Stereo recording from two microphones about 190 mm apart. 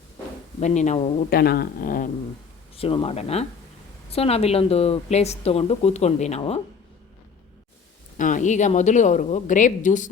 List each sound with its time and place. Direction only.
0.6 s speech: 40° left (ahead or behind)
1.3 s speech: 55° left (ahead or behind)
2.7 s speech: 30° left (ahead or behind)
8.2 s speech: 40° left (ahead or behind)